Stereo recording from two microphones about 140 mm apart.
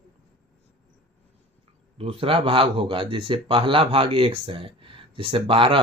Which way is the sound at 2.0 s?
40° right (ahead or behind).